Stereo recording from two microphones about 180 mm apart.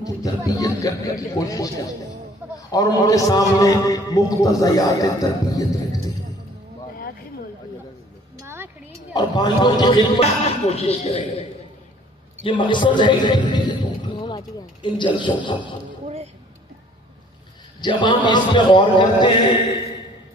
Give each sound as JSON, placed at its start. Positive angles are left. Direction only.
{"t": 0.5, "sound": "a man's voice", "side_deg": 20}
{"t": 8.4, "sound": "music", "side_deg": -15}
{"t": 9.1, "sound": "a man's voice", "side_deg": 25}
{"t": 12.4, "sound": "speech", "side_deg": 25}
{"t": 17.7, "sound": "a man's voice", "side_deg": 25}